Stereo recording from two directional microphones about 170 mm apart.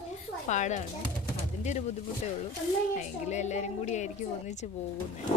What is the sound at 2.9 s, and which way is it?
Speech, 45° left (ahead or behind).